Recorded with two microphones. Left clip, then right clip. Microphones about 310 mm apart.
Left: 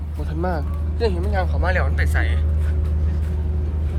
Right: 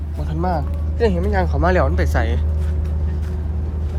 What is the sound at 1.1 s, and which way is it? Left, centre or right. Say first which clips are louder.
Speech: right 4 dB; right.